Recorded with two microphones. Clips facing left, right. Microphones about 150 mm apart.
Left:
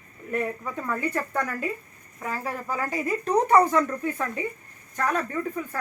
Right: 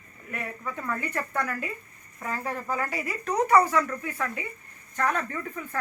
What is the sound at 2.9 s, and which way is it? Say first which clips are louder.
Speech: left 6 dB; 25° left (ahead or behind).